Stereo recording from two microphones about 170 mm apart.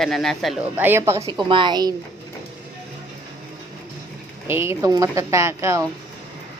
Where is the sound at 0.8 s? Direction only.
15° right (ahead or behind).